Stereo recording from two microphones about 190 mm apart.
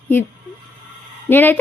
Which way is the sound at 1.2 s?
10° left (ahead or behind).